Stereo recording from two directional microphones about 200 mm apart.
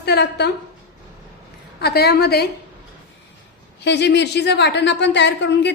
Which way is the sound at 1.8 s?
55° left (ahead or behind).